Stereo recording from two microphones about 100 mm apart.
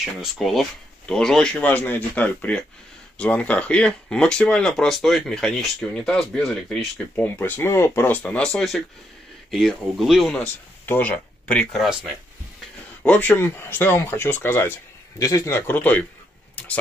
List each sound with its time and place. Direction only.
0.0 s speech: centre (ahead or behind)
7.2 s speech: 20° left (ahead or behind); by 10.3 s centre (ahead or behind)
10.3 s speech: 15° left (ahead or behind)
13.0 s speech: 15° left (ahead or behind)
15.1 s speech: 35° left (ahead or behind); by 16.7 s 15° left (ahead or behind)